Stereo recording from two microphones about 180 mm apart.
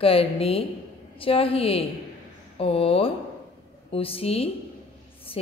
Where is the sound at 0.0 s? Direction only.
30° left (ahead or behind).